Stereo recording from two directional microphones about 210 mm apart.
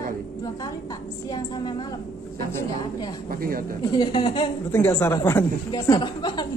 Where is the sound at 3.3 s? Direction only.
45° right (ahead or behind).